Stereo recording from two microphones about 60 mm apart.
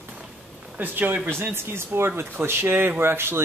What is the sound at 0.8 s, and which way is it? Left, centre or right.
Speech, right.